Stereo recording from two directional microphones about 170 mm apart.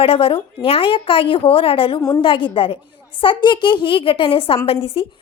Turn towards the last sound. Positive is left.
turn(degrees=35)  # may be behind; listen again after turning